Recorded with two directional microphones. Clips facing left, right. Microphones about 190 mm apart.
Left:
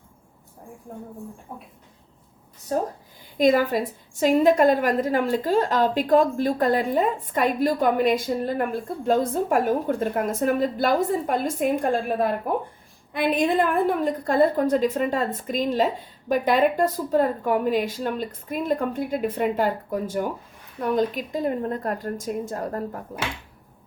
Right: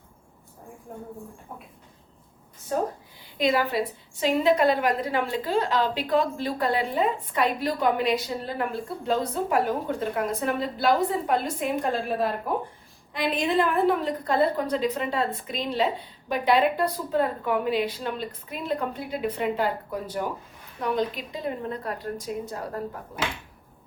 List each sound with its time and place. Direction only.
2.7 s a woman's voice: 35° left (ahead or behind)